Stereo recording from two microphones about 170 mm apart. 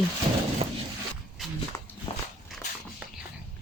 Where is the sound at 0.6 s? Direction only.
35° right (ahead or behind).